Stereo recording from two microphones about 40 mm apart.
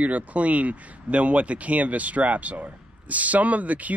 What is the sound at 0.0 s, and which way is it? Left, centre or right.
Speech, right.